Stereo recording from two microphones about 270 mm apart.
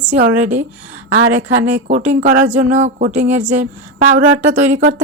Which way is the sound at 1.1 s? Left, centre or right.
Right.